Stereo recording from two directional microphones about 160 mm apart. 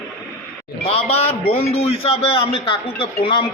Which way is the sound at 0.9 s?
40° left (ahead or behind).